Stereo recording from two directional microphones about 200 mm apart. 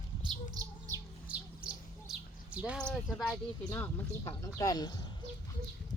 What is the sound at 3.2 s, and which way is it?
Speech, 15° left (ahead or behind).